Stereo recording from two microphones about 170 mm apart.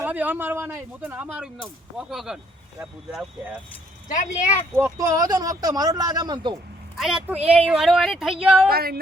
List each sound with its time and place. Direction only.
0.0 s speech: 10° right (ahead or behind)
4.1 s speech: 45° left (ahead or behind)
4.7 s speech: 15° right (ahead or behind)
7.0 s speech: 5° right (ahead or behind)
8.7 s speech: 60° right (ahead or behind)